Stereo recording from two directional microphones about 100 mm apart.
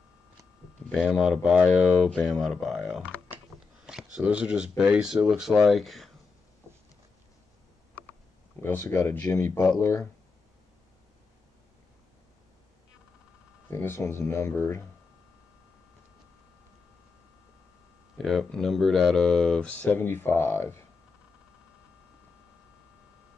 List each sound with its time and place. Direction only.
0.9 s speech: 5° right (ahead or behind)
2.3 s speech: centre (ahead or behind)
8.6 s speech: 20° left (ahead or behind)
13.7 s speech: 25° left (ahead or behind)
18.1 s speech: centre (ahead or behind); by 20.8 s 25° left (ahead or behind)